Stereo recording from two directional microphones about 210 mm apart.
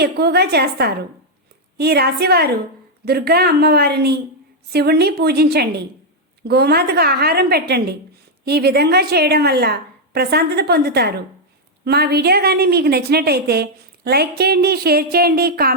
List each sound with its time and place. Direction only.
0.0 s a woman's voice: 50° right (ahead or behind)